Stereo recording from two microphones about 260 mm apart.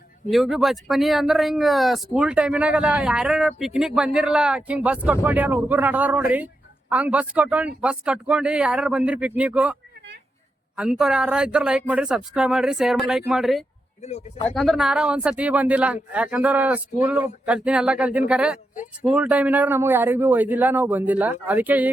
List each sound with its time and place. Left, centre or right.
0.3 s speech: centre
10.8 s speech: centre
14.0 s speech: left
14.5 s speech: centre